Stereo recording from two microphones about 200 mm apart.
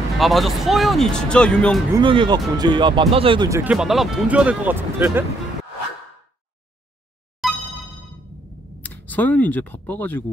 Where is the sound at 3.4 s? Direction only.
15° right (ahead or behind).